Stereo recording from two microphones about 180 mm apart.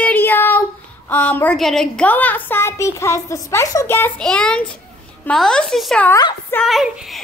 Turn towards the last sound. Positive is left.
turn(degrees=0)  # may be behind; listen again after turning